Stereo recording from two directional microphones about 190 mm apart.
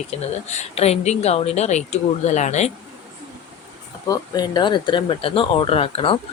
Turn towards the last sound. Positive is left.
turn(degrees=30)  # may be behind; listen again after turning